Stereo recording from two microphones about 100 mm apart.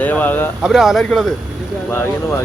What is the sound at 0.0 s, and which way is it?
Speech, 15° left (ahead or behind).